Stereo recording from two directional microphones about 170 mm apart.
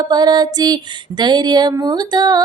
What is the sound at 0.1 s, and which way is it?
Female singing, 25° right (ahead or behind).